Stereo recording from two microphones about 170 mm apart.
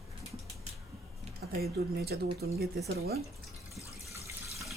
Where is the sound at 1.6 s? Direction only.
70° right (ahead or behind).